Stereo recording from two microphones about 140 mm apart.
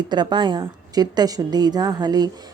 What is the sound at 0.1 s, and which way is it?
A woman's voice, 30° right (ahead or behind).